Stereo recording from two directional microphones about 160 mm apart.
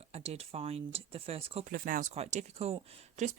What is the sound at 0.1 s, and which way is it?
Speech, 40° right (ahead or behind).